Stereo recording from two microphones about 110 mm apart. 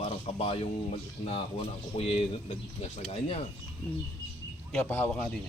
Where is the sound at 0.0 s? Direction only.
60° left (ahead or behind).